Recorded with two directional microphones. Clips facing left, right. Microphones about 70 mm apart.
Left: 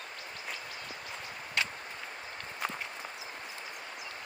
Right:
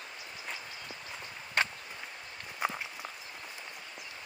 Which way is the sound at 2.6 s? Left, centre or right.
Centre.